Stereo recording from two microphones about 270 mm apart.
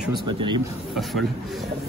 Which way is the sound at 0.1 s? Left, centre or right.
Centre.